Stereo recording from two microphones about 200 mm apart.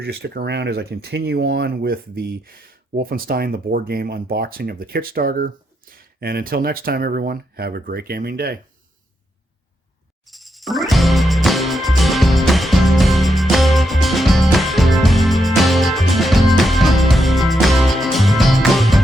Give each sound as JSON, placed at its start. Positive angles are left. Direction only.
{"t": 0.0, "sound": "speech", "side_deg": -50}
{"t": 10.2, "sound": "music", "side_deg": 0}